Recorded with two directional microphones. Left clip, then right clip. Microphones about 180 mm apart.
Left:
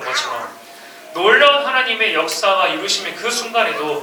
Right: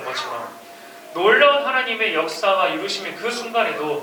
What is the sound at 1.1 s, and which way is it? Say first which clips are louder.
Speech: left 3 dB; 10° right (ahead or behind).